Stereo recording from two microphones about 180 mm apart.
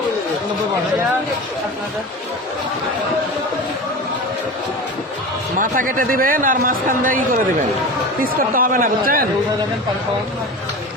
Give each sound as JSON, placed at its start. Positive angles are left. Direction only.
{"t": 5.5, "sound": "speech", "side_deg": -50}